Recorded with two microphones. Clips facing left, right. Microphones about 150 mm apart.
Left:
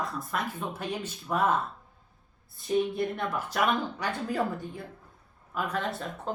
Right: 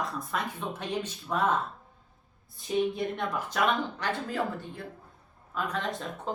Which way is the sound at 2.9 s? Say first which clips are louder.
Left 1 dB; 5° left (ahead or behind).